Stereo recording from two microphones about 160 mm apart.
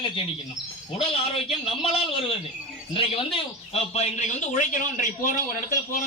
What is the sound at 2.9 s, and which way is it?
A man's voice, 35° left (ahead or behind).